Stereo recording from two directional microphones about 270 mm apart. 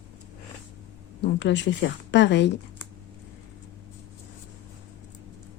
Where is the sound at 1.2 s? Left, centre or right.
Left.